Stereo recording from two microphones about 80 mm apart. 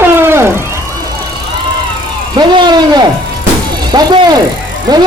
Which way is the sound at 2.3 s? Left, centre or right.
Right.